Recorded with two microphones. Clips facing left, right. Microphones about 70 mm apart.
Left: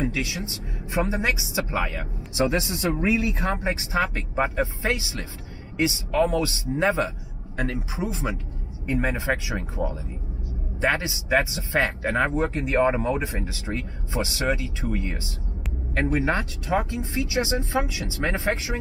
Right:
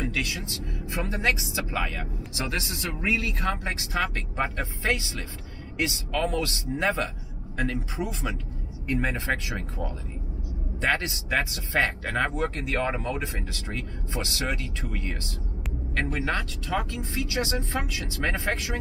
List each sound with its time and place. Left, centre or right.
0.0 s speech: centre
12.4 s speech: left
13.7 s speech: centre